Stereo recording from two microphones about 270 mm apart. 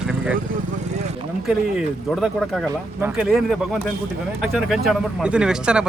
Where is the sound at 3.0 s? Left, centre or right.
Centre.